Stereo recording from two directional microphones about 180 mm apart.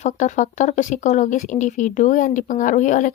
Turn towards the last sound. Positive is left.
turn(degrees=45)  # may be behind; listen again after turning